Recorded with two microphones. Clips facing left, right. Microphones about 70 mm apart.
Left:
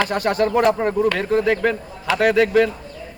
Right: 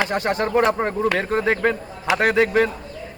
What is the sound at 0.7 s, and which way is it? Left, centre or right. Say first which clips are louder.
A man's voice: left 2 dB; right.